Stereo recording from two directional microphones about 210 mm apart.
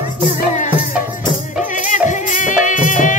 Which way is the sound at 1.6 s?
35° left (ahead or behind).